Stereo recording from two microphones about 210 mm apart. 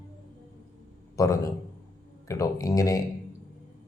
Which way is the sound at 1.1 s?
15° left (ahead or behind).